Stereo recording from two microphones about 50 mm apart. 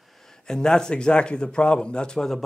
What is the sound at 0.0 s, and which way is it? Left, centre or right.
Speech, centre.